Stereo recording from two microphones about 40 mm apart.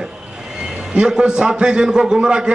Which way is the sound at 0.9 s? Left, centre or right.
Right.